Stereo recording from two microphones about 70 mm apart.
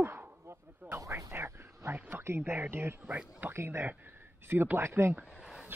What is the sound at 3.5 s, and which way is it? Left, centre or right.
Speech, right.